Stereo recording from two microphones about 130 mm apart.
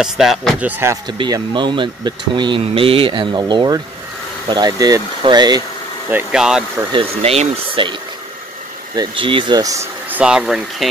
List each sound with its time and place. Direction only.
0.0 s speech: 5° right (ahead or behind)
0.7 s speech: 15° right (ahead or behind)
1.0 s speech: 35° right (ahead or behind)
6.3 s speech: 5° right (ahead or behind)
6.9 s speech: 45° right (ahead or behind)
8.9 s speech: 35° right (ahead or behind)
9.6 s speech: 25° right (ahead or behind)
10.0 s speech: 10° right (ahead or behind)